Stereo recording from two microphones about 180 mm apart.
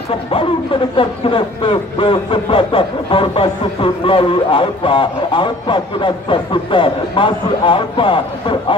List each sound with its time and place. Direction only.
0.9 s speech: 30° left (ahead or behind)